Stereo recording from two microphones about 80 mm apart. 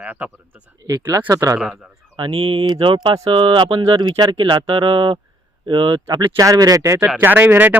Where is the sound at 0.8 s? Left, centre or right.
Right.